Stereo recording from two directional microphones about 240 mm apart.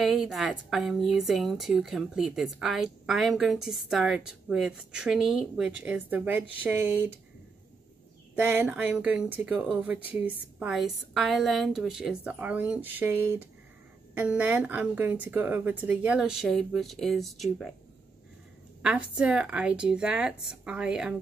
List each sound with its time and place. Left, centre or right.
0.0 s speech: centre
8.4 s speech: centre
18.8 s speech: centre